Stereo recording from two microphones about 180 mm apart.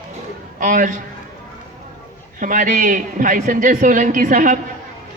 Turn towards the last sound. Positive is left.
turn(degrees=-50)  # may be behind; listen again after turning